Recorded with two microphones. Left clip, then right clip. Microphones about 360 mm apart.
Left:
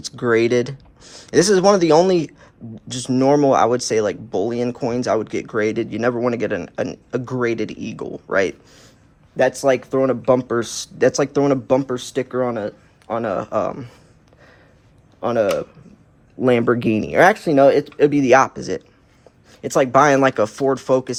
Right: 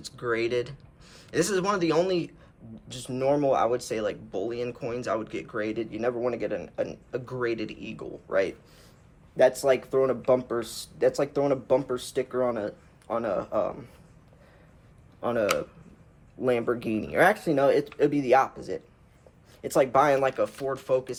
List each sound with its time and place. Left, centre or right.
0.0 s speech: centre
15.2 s speech: centre